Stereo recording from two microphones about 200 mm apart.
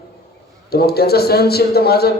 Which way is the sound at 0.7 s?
50° left (ahead or behind).